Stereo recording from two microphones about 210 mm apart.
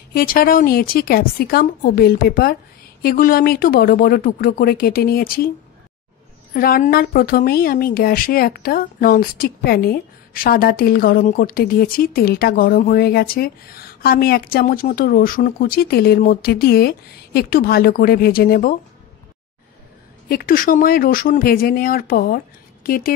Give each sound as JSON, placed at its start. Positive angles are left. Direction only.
{"t": 0.1, "sound": "a woman's voice", "side_deg": 45}
{"t": 6.5, "sound": "a woman's voice", "side_deg": 45}
{"t": 20.2, "sound": "a woman's voice", "side_deg": 45}